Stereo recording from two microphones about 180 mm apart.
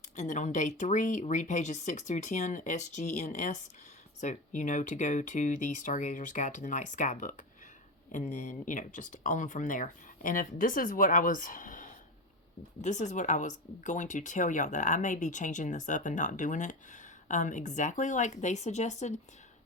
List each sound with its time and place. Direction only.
0.2 s speech: 45° left (ahead or behind)